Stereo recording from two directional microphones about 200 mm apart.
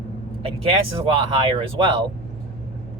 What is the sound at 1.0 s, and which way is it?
Speech, 25° right (ahead or behind).